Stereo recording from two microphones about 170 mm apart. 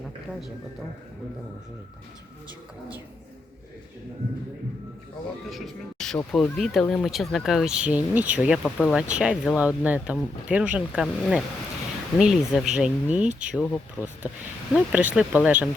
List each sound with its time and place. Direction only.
5.5 s speech: centre (ahead or behind)